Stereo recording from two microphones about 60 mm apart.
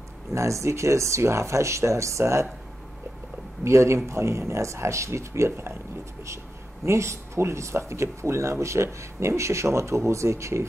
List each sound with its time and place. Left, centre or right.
0.3 s speech: right
3.6 s speech: right
6.9 s speech: right